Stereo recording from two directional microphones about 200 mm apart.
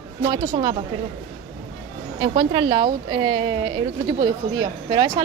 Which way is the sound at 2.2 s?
25° right (ahead or behind).